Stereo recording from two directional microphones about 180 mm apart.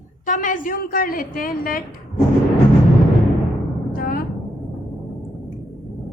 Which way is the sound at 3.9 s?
55° left (ahead or behind).